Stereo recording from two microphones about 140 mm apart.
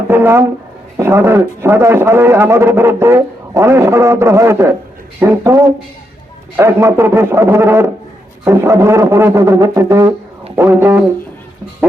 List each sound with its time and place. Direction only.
0.1 s a man's voice: 15° right (ahead or behind)